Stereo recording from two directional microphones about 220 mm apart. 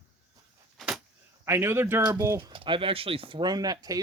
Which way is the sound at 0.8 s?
Centre (ahead or behind).